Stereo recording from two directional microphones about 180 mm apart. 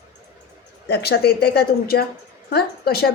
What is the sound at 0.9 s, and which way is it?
A woman's voice, 65° left (ahead or behind).